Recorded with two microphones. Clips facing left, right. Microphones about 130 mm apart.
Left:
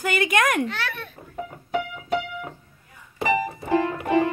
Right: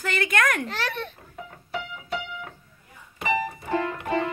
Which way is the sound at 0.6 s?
35° right (ahead or behind).